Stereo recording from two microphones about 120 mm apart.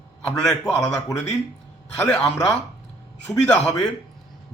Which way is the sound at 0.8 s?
25° left (ahead or behind).